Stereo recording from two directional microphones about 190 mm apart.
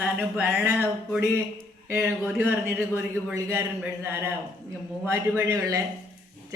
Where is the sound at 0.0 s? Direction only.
10° right (ahead or behind).